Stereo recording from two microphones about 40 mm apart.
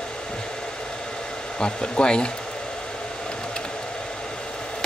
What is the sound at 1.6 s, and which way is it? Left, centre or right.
Speech, left.